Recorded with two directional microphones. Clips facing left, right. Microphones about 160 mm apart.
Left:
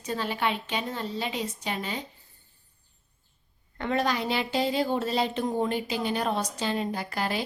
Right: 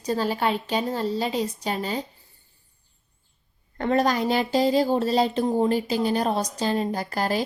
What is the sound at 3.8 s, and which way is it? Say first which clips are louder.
Speech: right 5 dB; 40° right (ahead or behind).